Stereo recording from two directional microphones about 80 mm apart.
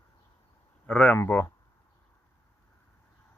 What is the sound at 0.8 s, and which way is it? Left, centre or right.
Speech, centre.